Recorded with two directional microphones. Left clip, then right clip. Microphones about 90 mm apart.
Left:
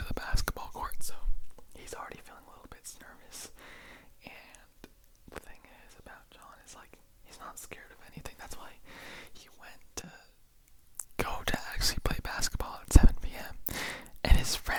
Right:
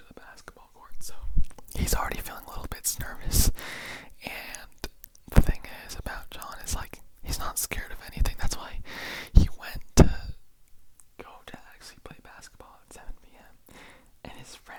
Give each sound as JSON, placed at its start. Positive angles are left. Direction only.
{"t": 0.0, "sound": "whispering", "side_deg": 35}
{"t": 0.9, "sound": "whispering", "side_deg": 5}
{"t": 1.5, "sound": "whispering", "side_deg": -35}
{"t": 10.9, "sound": "whispering", "side_deg": 40}